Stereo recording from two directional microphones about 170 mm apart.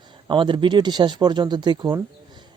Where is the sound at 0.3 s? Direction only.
30° right (ahead or behind).